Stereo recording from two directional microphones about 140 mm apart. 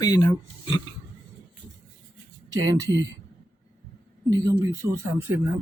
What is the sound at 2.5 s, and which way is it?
Speech, 25° right (ahead or behind).